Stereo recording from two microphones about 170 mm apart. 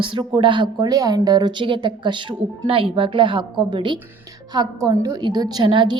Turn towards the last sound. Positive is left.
turn(degrees=-30)  # may be behind; listen again after turning